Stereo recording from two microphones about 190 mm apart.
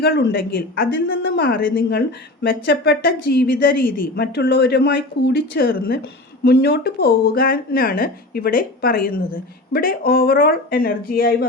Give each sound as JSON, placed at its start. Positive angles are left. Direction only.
{"t": 0.0, "sound": "a woman's voice", "side_deg": 65}